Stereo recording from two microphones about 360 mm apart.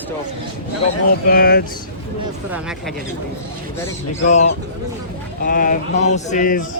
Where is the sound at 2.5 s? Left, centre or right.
Centre.